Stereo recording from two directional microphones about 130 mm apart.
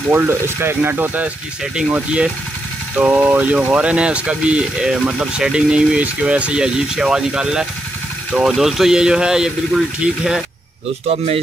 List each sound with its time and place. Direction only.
0.1 s speech: 20° right (ahead or behind)
11.1 s speech: 50° right (ahead or behind)